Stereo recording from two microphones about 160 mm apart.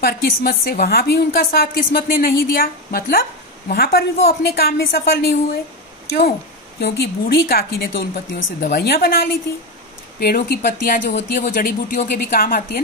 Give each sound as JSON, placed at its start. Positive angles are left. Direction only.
{"t": 0.0, "sound": "a woman's voice", "side_deg": 70}
{"t": 6.8, "sound": "a woman's voice", "side_deg": 85}